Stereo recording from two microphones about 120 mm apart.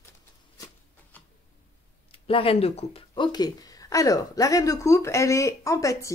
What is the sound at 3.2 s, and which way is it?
A woman's voice, 35° left (ahead or behind).